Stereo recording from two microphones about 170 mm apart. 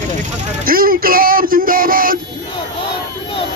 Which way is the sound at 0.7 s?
60° right (ahead or behind).